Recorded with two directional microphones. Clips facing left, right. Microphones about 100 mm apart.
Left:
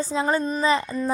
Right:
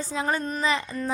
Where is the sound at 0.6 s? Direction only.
35° left (ahead or behind).